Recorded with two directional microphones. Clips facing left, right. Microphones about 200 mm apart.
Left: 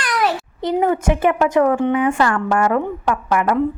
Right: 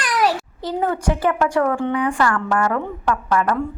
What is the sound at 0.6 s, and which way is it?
A woman's voice, 20° left (ahead or behind).